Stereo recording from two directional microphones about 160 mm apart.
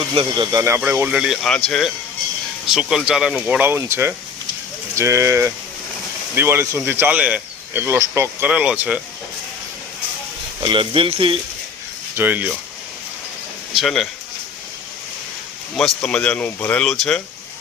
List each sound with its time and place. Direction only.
0.1 s speech: 35° right (ahead or behind)
0.5 s speech: 15° right (ahead or behind); by 1.6 s centre (ahead or behind)
2.6 s speech: 5° right (ahead or behind)
10.6 s speech: 30° right (ahead or behind)
12.1 s speech: 10° right (ahead or behind)
13.7 s speech: centre (ahead or behind)
16.0 s speech: 5° left (ahead or behind)